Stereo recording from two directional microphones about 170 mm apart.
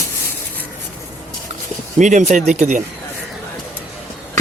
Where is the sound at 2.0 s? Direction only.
45° right (ahead or behind).